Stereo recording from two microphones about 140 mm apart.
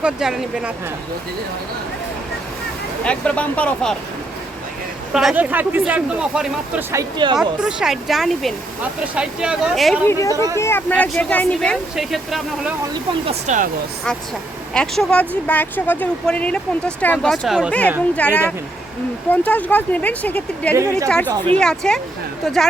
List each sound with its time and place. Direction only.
0.0 s speech: 5° right (ahead or behind)
3.0 s speech: 10° left (ahead or behind)
5.1 s speech: 10° right (ahead or behind)
7.2 s a woman's voice: 35° right (ahead or behind)
7.6 s speech: 5° right (ahead or behind)
10.1 s speech: 25° left (ahead or behind)
10.3 s a woman's voice: 25° right (ahead or behind)
10.6 s speech: 15° left (ahead or behind)
11.9 s speech: centre (ahead or behind)
13.5 s speech: 55° right (ahead or behind)
14.7 s speech: 5° left (ahead or behind)
17.7 s speech: 10° left (ahead or behind)
20.7 s a woman's voice: 20° right (ahead or behind)
21.5 s speech: 5° left (ahead or behind)